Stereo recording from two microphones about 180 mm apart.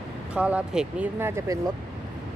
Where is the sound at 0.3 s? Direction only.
5° right (ahead or behind).